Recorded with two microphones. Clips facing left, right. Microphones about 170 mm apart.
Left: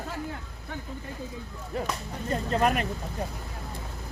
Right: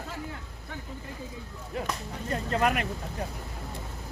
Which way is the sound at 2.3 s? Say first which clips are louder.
Left 2 dB; 35° left (ahead or behind).